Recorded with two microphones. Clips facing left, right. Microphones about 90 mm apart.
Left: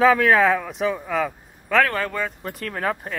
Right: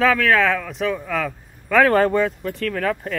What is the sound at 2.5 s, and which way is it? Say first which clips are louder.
Speech: right 1 dB; 25° left (ahead or behind).